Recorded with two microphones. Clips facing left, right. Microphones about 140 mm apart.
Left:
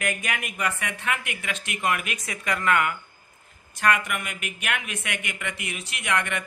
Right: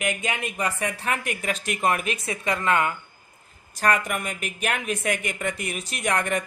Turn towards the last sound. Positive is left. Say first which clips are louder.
# right 3 dB
turn(degrees=-40)  # may be behind; listen again after turning